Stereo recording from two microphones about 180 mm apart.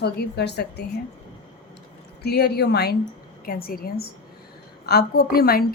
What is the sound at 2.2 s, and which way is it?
A woman's voice, 65° left (ahead or behind).